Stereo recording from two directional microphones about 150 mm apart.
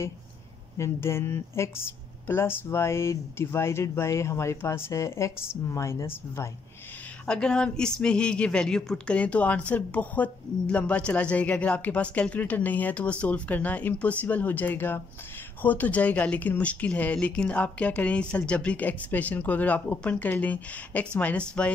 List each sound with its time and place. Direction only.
0.7 s speech: 15° left (ahead or behind)
7.2 s speech: 5° left (ahead or behind)